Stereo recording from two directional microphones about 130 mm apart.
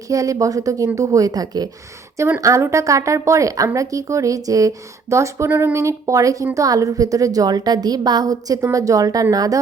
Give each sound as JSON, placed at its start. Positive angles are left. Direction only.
{"t": 0.1, "sound": "a woman's voice", "side_deg": -25}